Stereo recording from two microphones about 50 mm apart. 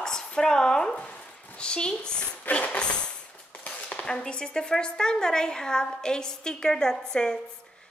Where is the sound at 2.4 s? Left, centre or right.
Left.